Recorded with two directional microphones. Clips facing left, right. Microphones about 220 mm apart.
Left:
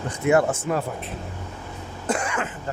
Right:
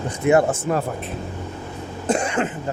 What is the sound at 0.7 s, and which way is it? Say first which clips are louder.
Speech: right 3 dB; 35° right (ahead or behind).